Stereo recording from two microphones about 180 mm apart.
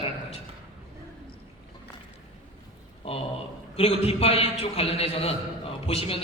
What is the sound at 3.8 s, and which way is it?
A man's voice, 35° left (ahead or behind).